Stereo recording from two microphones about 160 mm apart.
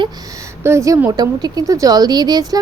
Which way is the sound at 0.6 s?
15° right (ahead or behind).